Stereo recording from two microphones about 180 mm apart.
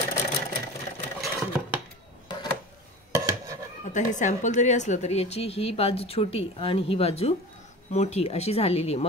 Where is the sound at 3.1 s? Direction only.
20° right (ahead or behind).